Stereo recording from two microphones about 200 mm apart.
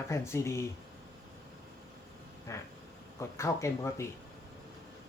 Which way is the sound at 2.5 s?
15° left (ahead or behind).